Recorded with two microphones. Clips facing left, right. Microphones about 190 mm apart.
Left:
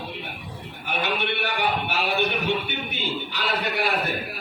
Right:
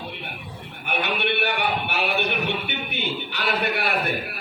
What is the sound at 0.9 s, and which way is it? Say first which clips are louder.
A man's voice: right 1 dB; 60° right (ahead or behind).